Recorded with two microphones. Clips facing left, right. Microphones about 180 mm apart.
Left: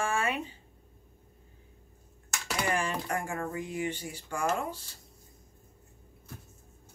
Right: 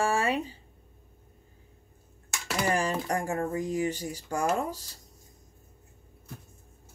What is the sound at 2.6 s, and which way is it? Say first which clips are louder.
Speech: right 4 dB; 40° right (ahead or behind).